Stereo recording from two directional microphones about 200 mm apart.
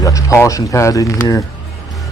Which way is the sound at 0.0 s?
15° left (ahead or behind).